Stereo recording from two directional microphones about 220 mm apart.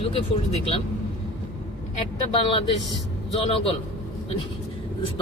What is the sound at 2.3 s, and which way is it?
Speech, 25° left (ahead or behind).